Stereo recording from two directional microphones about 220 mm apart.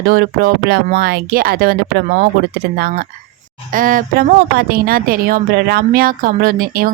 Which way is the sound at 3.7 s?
40° right (ahead or behind).